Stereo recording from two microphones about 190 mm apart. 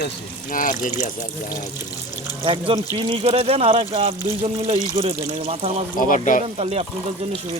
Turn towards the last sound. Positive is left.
turn(degrees=-35)  # may be behind; listen again after turning